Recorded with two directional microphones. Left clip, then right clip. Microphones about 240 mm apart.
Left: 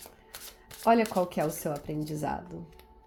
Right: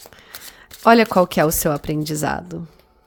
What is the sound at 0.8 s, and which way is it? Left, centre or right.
Speech, right.